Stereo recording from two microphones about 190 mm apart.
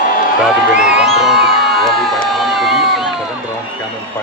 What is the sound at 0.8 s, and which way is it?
Crowd, centre (ahead or behind).